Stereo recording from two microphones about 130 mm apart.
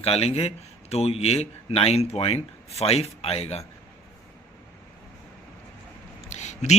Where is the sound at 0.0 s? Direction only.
50° left (ahead or behind).